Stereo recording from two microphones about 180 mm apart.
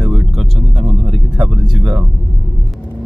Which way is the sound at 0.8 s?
30° right (ahead or behind).